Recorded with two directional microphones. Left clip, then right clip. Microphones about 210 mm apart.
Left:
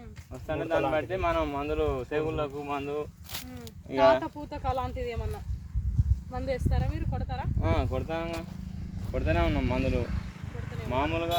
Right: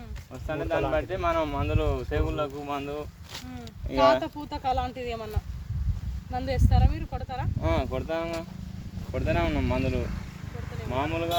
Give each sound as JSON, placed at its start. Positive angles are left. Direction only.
{"t": 0.4, "sound": "speech", "side_deg": -10}
{"t": 4.2, "sound": "speech", "side_deg": -40}
{"t": 6.3, "sound": "speech", "side_deg": -45}
{"t": 9.1, "sound": "speech", "side_deg": -5}
{"t": 10.8, "sound": "speech", "side_deg": 30}